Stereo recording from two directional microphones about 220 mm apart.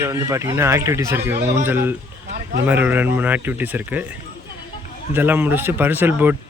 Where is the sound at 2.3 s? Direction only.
45° right (ahead or behind).